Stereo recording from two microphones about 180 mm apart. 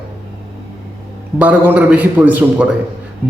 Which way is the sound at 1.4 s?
10° right (ahead or behind).